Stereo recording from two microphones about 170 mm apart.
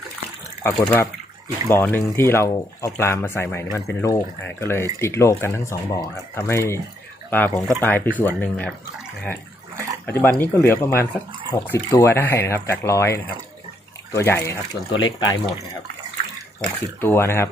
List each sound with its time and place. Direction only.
0.6 s speech: 15° left (ahead or behind)
10.1 s speech: 10° left (ahead or behind)
16.6 s speech: 10° left (ahead or behind)